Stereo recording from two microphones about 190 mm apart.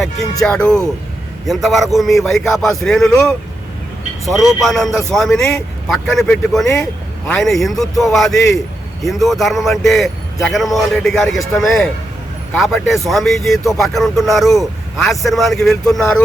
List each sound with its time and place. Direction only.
0.4 s speech: 5° left (ahead or behind)